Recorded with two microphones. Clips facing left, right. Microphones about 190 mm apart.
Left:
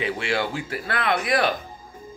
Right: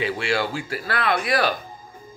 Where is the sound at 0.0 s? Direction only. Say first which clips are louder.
Right 1 dB; 20° left (ahead or behind).